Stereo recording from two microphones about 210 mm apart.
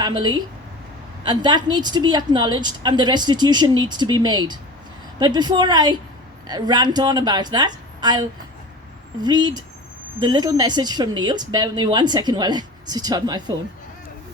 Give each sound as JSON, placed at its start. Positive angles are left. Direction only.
{"t": 0.0, "sound": "a woman's voice", "side_deg": -20}